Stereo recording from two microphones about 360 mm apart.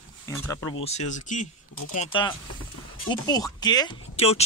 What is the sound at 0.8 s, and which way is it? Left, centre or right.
Speech, centre.